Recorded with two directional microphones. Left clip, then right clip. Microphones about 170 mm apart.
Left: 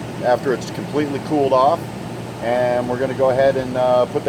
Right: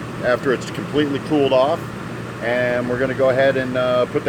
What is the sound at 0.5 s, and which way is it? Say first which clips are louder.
Speech: right 1 dB; 40° right (ahead or behind).